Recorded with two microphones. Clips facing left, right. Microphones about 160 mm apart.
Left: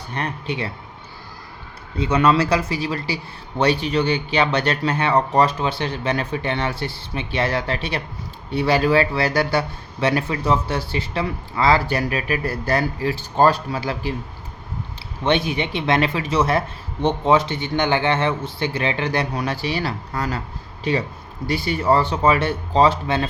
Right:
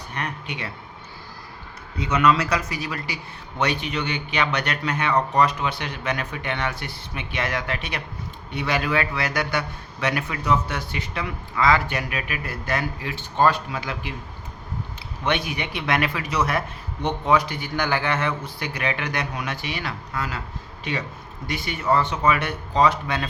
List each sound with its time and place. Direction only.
0.1 s speech: 30° left (ahead or behind)
2.0 s speech: 30° left (ahead or behind)
15.2 s speech: 25° left (ahead or behind)